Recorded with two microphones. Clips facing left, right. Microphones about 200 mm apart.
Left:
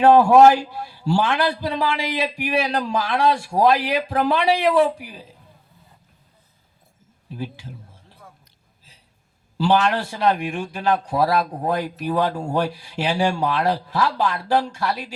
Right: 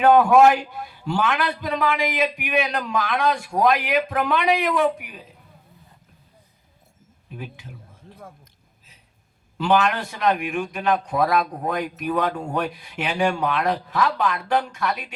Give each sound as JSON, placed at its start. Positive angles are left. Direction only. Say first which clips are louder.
{"t": 0.0, "sound": "a man's voice", "louder": "left 2 dB", "side_deg": 30}
{"t": 7.3, "sound": "a sound", "louder": "left 5 dB", "side_deg": 30}
{"t": 9.6, "sound": "a man's voice", "louder": "left 1 dB", "side_deg": 30}